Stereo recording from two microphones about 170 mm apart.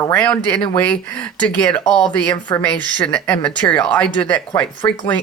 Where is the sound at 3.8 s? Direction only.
5° left (ahead or behind).